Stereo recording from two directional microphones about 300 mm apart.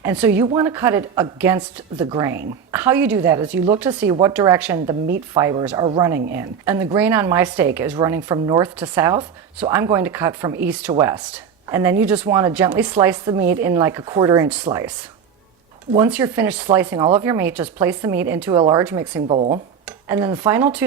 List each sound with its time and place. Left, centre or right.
0.0 s a woman's voice: centre
16.0 s a woman's voice: centre
19.3 s speech: centre
20.1 s a woman's voice: centre